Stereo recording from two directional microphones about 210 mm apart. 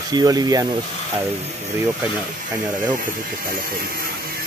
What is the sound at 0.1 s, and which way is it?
Speech, 20° right (ahead or behind).